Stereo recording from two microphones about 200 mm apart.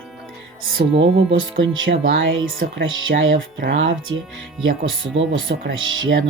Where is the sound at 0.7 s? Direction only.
65° right (ahead or behind).